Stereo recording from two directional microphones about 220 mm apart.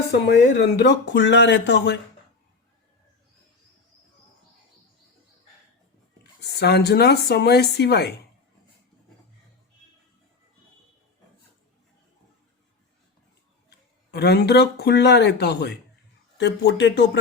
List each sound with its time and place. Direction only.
0.6 s speech: 50° left (ahead or behind)
6.4 s speech: 50° left (ahead or behind)
13.7 s speech: 50° left (ahead or behind)